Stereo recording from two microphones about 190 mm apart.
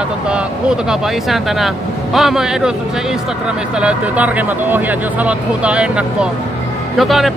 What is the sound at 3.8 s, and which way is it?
Speech, 5° right (ahead or behind).